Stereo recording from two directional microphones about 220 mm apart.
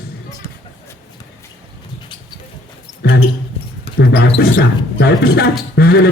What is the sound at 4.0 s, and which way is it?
A man's voice, 45° left (ahead or behind).